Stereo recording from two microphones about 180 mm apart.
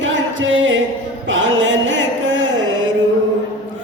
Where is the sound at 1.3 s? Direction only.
90° right.